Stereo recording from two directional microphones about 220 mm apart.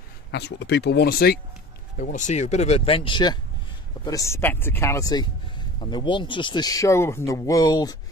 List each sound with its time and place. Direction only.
0.3 s speech: 50° left (ahead or behind)
2.0 s speech: 35° left (ahead or behind); by 8.0 s 20° left (ahead or behind)